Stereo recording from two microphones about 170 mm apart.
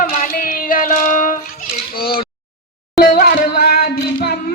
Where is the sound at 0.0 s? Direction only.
50° left (ahead or behind).